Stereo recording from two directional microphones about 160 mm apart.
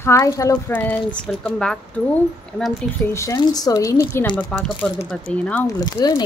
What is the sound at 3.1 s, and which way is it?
A woman's voice, 20° left (ahead or behind).